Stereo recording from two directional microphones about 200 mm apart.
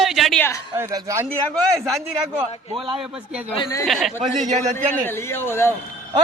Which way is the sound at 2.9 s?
5° right (ahead or behind).